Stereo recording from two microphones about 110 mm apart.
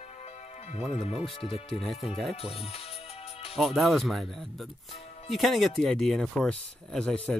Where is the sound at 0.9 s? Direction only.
70° left (ahead or behind).